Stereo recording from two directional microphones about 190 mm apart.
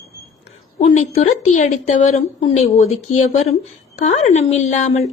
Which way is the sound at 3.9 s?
35° left (ahead or behind).